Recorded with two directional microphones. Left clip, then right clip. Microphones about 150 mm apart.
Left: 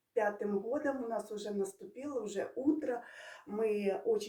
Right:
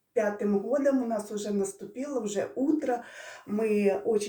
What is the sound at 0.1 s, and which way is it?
Speech, 15° left (ahead or behind).